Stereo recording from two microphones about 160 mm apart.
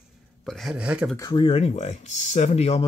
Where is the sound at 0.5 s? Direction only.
Centre (ahead or behind).